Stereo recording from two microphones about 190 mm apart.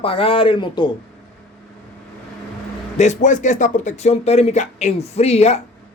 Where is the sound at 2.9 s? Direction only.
40° left (ahead or behind).